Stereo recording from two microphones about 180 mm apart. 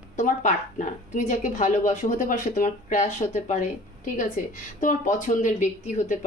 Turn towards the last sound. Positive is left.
turn(degrees=45)  # may be behind; listen again after turning